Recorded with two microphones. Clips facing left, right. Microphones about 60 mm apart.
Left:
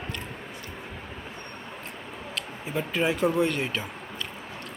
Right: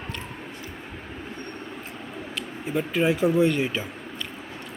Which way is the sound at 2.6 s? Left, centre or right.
Centre.